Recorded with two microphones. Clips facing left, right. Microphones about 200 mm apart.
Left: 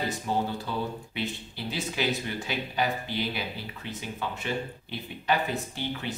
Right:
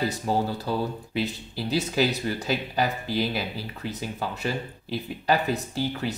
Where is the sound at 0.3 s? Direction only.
40° right (ahead or behind).